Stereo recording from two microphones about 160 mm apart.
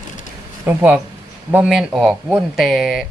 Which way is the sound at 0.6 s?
10° right (ahead or behind).